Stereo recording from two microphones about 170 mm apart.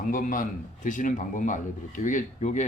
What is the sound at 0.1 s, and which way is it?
Speech, 50° left (ahead or behind).